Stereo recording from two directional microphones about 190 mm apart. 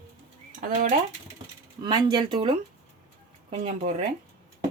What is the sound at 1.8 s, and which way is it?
Speech, 25° right (ahead or behind).